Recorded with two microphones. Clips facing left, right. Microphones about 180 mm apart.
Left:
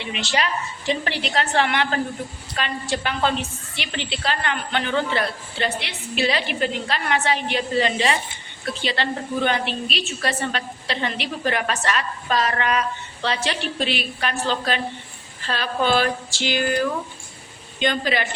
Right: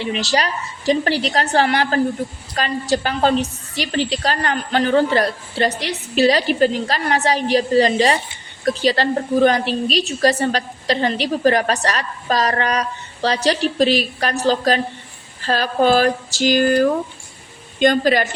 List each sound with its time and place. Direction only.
0.0 s a woman's voice: 40° right (ahead or behind)